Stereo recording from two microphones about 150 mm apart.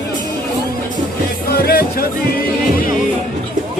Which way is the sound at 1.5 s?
90° left.